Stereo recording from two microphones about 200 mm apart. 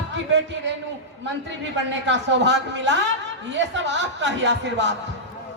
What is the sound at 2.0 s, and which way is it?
A man's voice, 65° right (ahead or behind).